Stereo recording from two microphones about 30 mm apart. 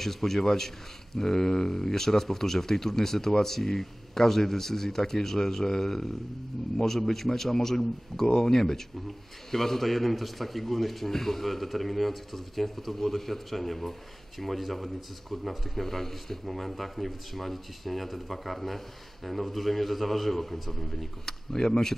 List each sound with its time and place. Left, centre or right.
0.0 s speech: centre
21.3 s speech: centre